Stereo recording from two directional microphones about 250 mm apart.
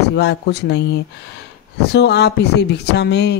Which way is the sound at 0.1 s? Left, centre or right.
Left.